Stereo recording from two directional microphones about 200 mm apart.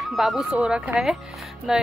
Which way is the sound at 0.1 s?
Centre (ahead or behind).